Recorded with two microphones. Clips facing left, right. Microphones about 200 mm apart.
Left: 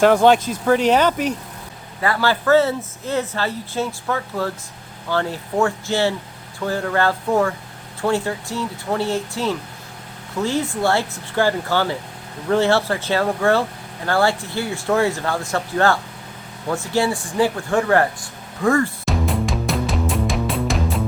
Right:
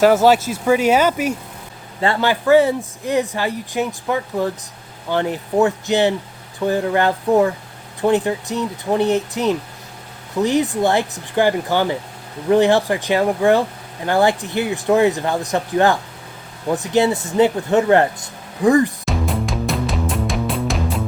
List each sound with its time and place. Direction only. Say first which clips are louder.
0.0 s speech: right 1 dB; 5° right (ahead or behind)
2.0 s speech: right 2 dB; 25° right (ahead or behind)
19.0 s music: even; centre (ahead or behind)